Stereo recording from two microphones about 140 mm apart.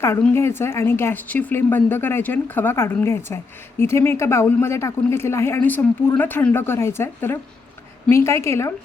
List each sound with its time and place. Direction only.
0.0 s a woman's voice: 20° left (ahead or behind)